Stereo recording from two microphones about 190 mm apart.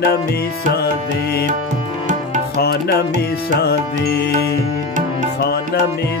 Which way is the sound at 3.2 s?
60° left (ahead or behind).